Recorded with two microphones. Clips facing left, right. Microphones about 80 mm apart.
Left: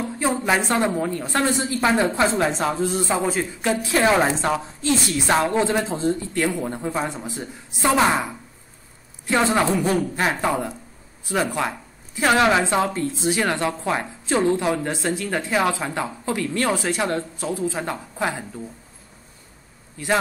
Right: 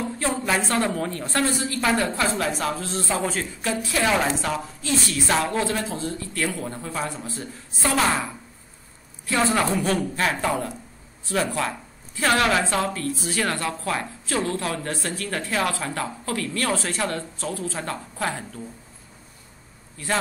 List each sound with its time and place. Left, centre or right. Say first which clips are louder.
0.0 s a woman's voice: left 3 dB; centre